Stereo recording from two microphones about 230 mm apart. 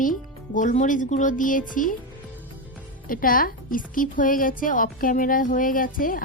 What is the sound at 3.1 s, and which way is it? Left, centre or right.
A woman's voice, left.